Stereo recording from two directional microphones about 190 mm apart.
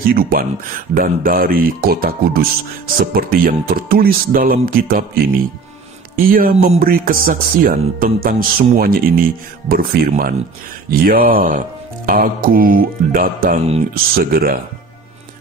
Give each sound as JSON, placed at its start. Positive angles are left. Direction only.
{"t": 0.1, "sound": "speech", "side_deg": -50}